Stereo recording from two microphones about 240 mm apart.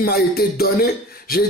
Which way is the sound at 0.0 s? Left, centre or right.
Left.